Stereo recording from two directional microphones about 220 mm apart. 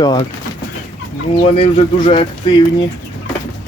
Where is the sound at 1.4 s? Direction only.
25° left (ahead or behind).